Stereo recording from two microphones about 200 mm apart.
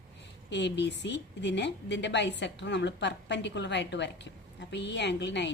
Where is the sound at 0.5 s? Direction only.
60° left (ahead or behind).